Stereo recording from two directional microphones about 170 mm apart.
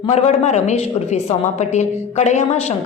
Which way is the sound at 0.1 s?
40° left (ahead or behind).